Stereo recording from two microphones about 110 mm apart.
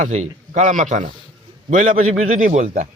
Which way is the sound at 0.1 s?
90° right.